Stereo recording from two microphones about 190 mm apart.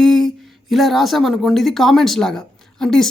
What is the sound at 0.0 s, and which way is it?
A woman's voice, centre (ahead or behind).